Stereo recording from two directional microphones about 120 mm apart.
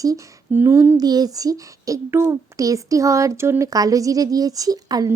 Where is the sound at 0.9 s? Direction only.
35° right (ahead or behind).